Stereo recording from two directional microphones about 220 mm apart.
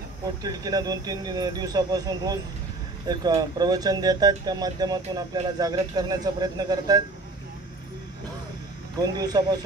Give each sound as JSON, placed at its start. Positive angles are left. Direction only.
{"t": 0.4, "sound": "speech", "side_deg": -15}
{"t": 9.0, "sound": "speech", "side_deg": -20}